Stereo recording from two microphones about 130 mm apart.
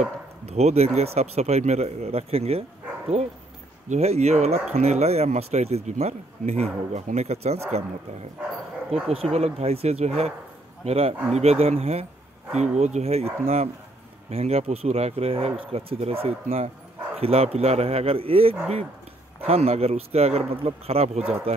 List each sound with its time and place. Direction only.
0.0 s speech: 55° right (ahead or behind)
9.1 s speech: 50° right (ahead or behind)